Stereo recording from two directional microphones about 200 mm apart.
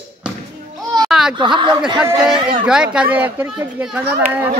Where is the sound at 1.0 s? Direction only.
Centre (ahead or behind).